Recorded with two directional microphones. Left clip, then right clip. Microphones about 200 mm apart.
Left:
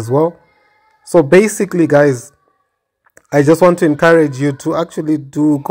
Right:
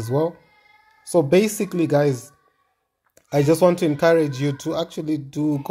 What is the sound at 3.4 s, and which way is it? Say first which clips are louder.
Speech: left 7 dB; 20° left (ahead or behind).